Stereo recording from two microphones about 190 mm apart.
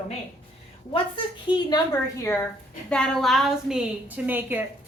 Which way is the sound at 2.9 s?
5° left (ahead or behind).